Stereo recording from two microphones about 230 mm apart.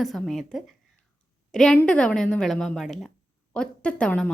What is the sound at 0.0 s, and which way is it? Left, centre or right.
Speech, centre.